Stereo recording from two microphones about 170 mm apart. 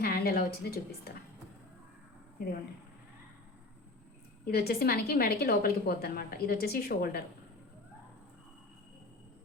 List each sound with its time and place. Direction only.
0.0 s a woman's voice: 65° left (ahead or behind)
4.5 s a woman's voice: 65° left (ahead or behind)